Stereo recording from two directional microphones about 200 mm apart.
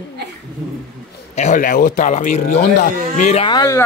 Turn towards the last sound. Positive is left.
turn(degrees=15)  # may be behind; listen again after turning